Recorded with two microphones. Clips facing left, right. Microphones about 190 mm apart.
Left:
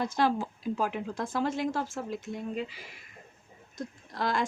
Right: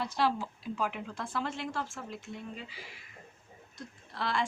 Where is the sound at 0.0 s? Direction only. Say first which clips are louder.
Left 3 dB; 45° left (ahead or behind).